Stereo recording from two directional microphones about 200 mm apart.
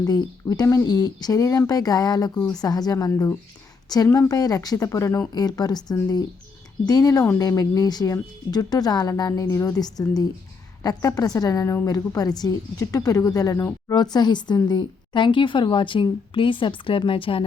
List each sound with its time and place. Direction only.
0.0 s a woman's voice: 20° left (ahead or behind)